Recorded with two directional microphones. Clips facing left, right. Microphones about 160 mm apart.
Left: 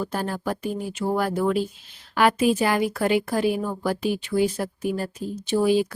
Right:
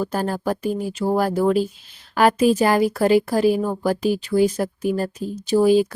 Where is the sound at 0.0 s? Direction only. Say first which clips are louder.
Right 4 dB; 40° right (ahead or behind).